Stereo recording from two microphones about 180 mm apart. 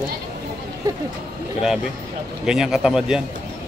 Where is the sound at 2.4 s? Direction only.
5° right (ahead or behind).